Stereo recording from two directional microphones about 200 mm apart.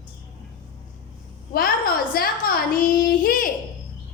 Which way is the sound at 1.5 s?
50° left (ahead or behind).